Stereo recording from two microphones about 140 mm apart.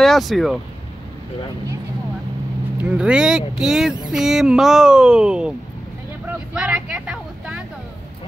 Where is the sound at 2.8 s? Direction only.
10° right (ahead or behind).